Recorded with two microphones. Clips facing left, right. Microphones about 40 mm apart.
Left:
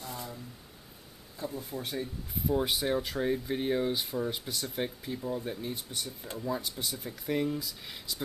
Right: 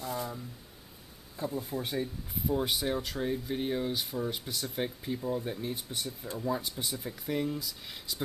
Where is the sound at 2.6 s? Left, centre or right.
Centre.